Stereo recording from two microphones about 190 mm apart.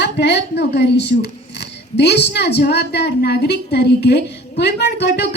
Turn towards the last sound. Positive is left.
turn(degrees=60)  # may be behind; listen again after turning